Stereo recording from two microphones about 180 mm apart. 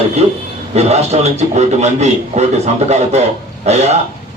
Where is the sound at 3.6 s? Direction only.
35° right (ahead or behind).